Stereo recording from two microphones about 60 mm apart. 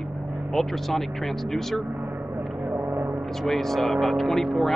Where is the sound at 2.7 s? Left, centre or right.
Right.